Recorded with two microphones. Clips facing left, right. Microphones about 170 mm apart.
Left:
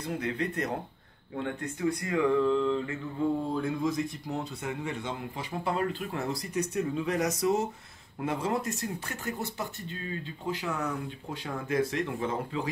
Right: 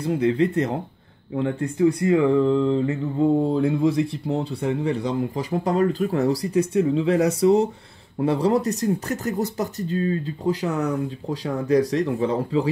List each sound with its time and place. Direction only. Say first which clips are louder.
0.0 s speech: right 11 dB; 30° right (ahead or behind)